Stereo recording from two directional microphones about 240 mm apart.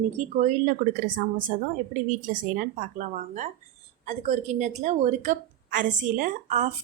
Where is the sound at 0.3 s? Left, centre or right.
Right.